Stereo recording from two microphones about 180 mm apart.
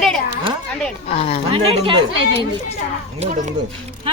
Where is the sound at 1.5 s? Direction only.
30° right (ahead or behind).